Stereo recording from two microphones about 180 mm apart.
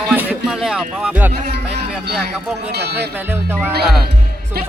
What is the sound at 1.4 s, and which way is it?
Speech, 65° right (ahead or behind).